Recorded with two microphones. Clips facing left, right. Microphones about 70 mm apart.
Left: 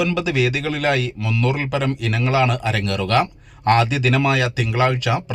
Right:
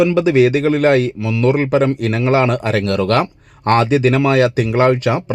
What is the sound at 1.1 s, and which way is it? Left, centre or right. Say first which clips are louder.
Speech: right 4 dB; centre.